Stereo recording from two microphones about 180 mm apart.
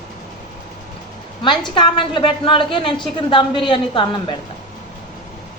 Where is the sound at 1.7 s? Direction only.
25° left (ahead or behind).